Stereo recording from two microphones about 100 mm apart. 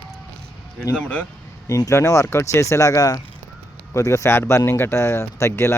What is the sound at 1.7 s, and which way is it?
Speech, 35° left (ahead or behind).